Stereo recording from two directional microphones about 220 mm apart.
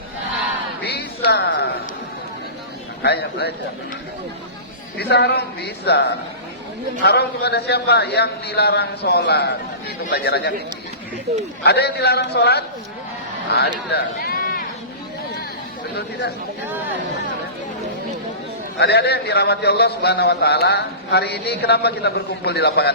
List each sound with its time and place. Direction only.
0.8 s a sound: 45° left (ahead or behind)
3.0 s a man's voice: 50° left (ahead or behind)
4.9 s a man's voice: 50° left (ahead or behind)
11.6 s a man's voice: 50° left (ahead or behind)
18.8 s a man's voice: 50° left (ahead or behind)